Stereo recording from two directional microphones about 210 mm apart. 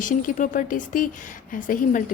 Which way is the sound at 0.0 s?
40° left (ahead or behind).